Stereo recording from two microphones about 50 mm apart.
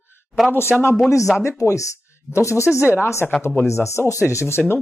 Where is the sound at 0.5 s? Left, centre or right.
Left.